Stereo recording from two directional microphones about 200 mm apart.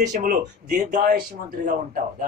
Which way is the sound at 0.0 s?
40° right (ahead or behind).